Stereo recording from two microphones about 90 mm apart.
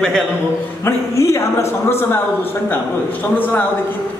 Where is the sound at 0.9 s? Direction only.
35° left (ahead or behind).